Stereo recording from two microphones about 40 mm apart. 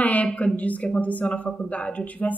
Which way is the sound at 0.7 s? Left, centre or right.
Left.